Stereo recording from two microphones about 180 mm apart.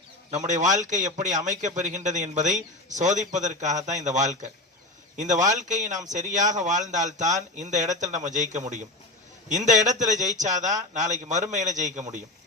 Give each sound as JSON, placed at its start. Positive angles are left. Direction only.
{"t": 0.3, "sound": "a man's voice", "side_deg": -45}